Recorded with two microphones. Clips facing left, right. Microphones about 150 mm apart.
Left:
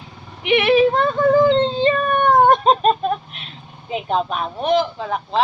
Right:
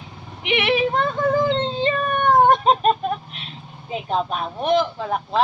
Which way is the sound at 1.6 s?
30° left (ahead or behind).